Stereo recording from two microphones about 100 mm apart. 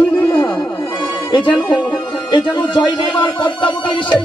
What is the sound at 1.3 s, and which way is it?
Speech, 55° left (ahead or behind).